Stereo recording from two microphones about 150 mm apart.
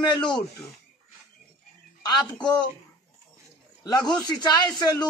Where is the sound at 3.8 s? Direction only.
30° left (ahead or behind).